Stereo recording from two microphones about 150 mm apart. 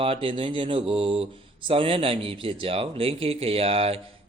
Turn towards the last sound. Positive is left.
turn(degrees=-40)  # may be behind; listen again after turning